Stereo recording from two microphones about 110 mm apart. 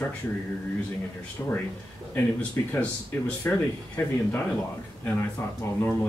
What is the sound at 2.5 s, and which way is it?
Speech, 15° left (ahead or behind).